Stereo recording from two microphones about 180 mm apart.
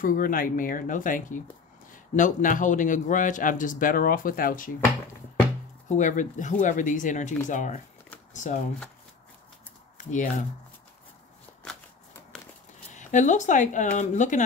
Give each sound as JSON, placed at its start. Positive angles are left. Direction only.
{"t": 0.0, "sound": "a man's voice", "side_deg": 50}
{"t": 5.9, "sound": "a man's voice", "side_deg": 45}
{"t": 12.9, "sound": "a man's voice", "side_deg": 45}